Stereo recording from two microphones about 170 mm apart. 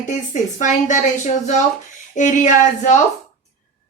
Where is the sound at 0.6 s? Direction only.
45° left (ahead or behind).